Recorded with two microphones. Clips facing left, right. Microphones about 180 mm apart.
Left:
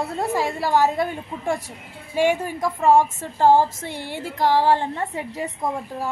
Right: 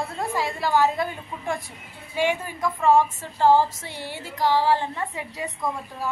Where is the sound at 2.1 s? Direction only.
45° left (ahead or behind).